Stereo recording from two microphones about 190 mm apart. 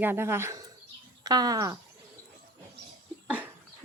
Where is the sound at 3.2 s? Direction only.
5° right (ahead or behind).